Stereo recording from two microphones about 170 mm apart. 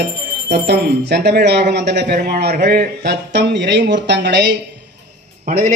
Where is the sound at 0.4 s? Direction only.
80° right.